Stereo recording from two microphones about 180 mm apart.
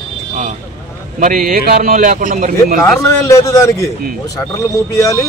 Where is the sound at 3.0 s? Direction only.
15° left (ahead or behind).